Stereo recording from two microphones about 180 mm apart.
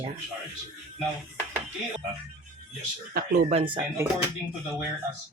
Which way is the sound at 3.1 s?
55° right (ahead or behind).